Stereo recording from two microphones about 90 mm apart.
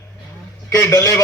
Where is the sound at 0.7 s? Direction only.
40° left (ahead or behind).